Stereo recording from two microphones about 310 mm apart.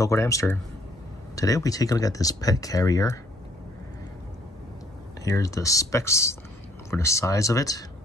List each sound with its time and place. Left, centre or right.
0.0 s speech: centre
5.2 s speech: centre